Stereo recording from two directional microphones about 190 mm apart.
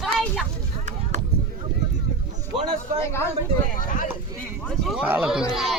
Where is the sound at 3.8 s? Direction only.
45° left (ahead or behind).